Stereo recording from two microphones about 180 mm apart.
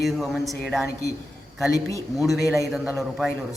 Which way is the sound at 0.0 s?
Centre (ahead or behind).